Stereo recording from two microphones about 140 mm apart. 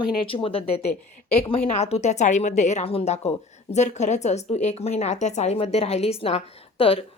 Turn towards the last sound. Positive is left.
turn(degrees=45)  # may be behind; listen again after turning